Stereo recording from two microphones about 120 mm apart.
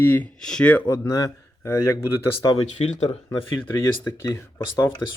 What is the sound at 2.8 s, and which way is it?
Speech, 70° left (ahead or behind).